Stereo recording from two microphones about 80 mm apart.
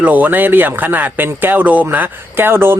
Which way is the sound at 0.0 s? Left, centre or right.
Right.